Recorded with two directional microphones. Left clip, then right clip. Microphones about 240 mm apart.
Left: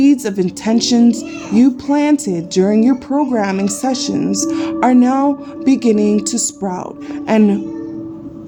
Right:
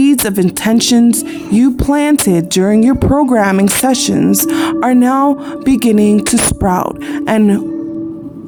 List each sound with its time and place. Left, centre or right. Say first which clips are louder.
0.0 s speech: right 2 dB; right